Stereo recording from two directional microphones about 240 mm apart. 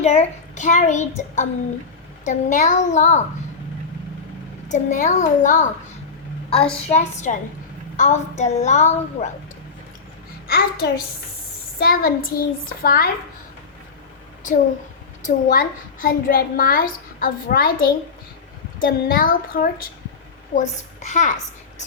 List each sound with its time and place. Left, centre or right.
0.0 s a child's voice: left
4.7 s a child's voice: left
10.4 s a child's voice: left
15.2 s a child's voice: left